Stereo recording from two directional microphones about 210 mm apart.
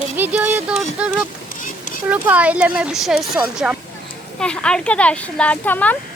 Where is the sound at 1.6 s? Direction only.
40° left (ahead or behind).